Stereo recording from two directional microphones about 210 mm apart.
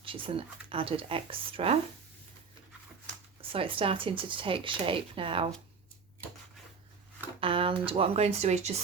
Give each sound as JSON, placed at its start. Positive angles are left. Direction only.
{"t": 0.0, "sound": "speech", "side_deg": -25}
{"t": 3.5, "sound": "speech", "side_deg": -25}
{"t": 7.4, "sound": "speech", "side_deg": -25}